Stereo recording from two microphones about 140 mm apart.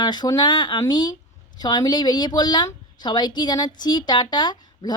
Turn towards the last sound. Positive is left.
turn(degrees=30)  # may be behind; listen again after turning